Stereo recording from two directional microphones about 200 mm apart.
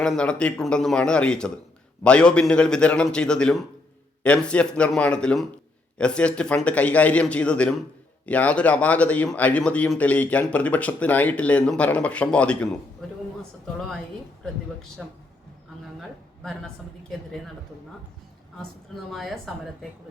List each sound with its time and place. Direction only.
0.0 s a man's voice: 5° left (ahead or behind)
15.0 s a man's voice: 5° right (ahead or behind)
19.1 s a man's voice: centre (ahead or behind)